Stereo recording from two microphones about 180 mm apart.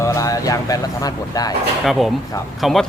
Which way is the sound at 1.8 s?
Centre (ahead or behind).